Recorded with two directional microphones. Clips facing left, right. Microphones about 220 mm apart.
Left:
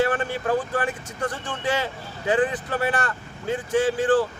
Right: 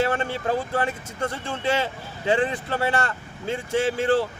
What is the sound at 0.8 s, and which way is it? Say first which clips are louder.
Speech: even; 25° right (ahead or behind).